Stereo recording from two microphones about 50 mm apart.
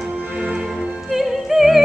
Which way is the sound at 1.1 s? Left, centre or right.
Centre.